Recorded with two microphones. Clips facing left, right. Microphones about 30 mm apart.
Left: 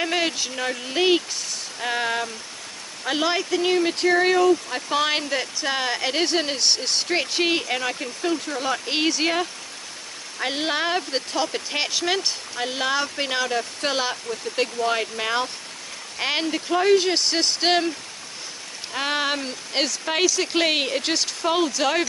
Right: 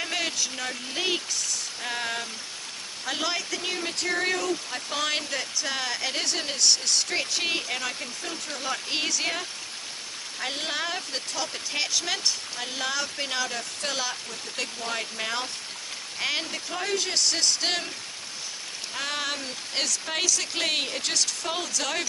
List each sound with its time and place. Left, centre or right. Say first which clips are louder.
0.0 s speech: left 5 dB; centre
1.8 s rain on surface: left 8 dB; centre
3.1 s speech: left 7 dB; centre
18.9 s speech: left 7 dB; left